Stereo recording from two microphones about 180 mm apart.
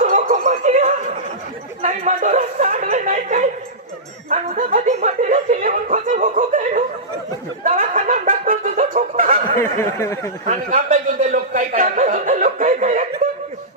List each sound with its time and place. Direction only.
0.0 s a sound: 45° right (ahead or behind)
4.4 s music: 45° right (ahead or behind)
9.7 s speech: 15° left (ahead or behind)
10.4 s speech: 45° right (ahead or behind)